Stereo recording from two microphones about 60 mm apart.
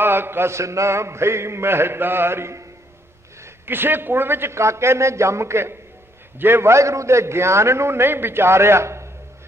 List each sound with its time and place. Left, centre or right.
0.0 s a man's voice: right
3.6 s a man's voice: right